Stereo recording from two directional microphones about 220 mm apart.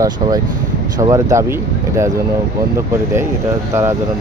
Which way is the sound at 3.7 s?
15° right (ahead or behind).